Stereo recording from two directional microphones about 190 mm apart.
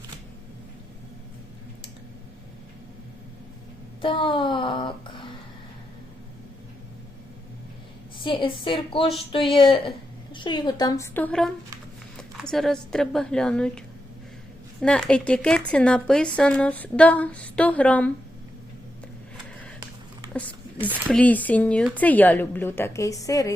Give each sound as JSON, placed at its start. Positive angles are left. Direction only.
{"t": 4.0, "sound": "a sound", "side_deg": 25}
{"t": 8.2, "sound": "a woman's voice", "side_deg": 25}
{"t": 21.1, "sound": "speech", "side_deg": 5}